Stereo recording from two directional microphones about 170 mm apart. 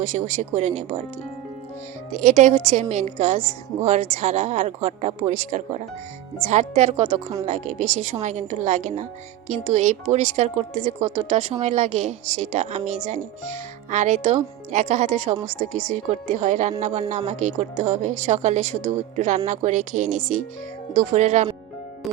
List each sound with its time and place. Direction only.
0.0 s speech: 45° right (ahead or behind)
2.1 s a woman's voice: 45° right (ahead or behind)